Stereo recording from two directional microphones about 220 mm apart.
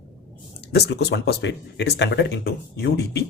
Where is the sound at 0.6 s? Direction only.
50° left (ahead or behind).